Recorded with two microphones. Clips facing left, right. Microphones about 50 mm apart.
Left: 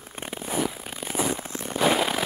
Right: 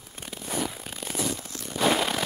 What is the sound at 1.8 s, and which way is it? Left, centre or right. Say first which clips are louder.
Firecracker: left 1 dB; centre.